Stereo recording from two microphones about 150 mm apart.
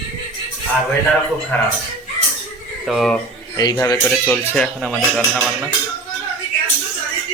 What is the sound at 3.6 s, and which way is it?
Speech, 25° left (ahead or behind).